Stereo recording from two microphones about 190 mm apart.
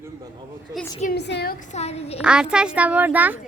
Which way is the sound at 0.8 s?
Centre (ahead or behind).